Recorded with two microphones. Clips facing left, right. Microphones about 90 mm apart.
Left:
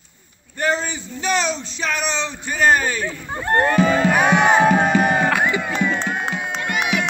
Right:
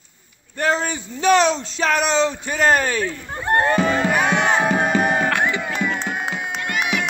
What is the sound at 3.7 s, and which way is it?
Music, centre (ahead or behind).